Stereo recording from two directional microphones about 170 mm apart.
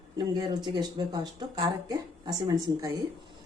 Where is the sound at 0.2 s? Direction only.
25° right (ahead or behind).